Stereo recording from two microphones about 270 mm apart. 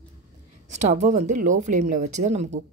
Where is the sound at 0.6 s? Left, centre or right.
Right.